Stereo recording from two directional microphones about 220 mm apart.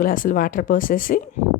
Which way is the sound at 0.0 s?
40° left (ahead or behind).